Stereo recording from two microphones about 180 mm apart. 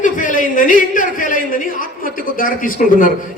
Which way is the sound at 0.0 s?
45° left (ahead or behind).